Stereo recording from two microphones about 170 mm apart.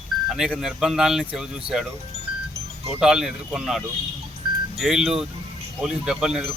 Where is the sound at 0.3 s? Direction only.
Centre (ahead or behind).